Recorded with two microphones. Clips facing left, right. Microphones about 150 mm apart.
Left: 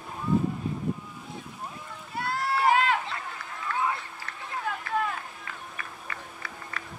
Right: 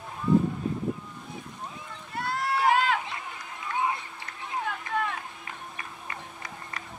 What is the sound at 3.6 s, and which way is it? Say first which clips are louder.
Run: even; 20° right (ahead or behind).